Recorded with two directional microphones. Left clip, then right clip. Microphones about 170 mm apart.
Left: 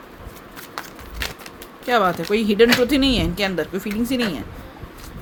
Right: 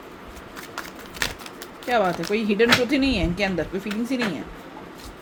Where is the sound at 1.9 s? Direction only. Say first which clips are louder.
Left 3 dB; 35° left (ahead or behind).